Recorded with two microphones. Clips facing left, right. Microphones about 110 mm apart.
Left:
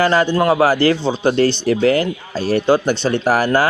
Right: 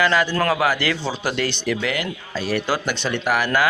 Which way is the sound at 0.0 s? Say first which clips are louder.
Left 5 dB; 30° left (ahead or behind).